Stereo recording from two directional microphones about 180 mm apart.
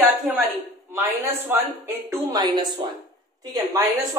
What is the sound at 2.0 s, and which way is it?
Speech, 20° right (ahead or behind).